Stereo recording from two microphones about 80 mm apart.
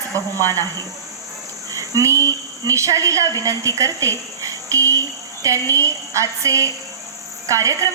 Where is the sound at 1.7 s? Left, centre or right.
Right.